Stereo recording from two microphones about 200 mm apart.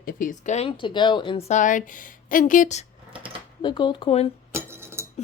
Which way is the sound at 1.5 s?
40° left (ahead or behind).